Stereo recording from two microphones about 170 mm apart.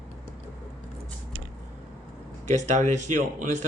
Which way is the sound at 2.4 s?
45° right (ahead or behind).